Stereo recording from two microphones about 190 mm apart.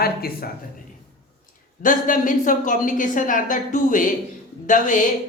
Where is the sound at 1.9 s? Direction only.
45° left (ahead or behind).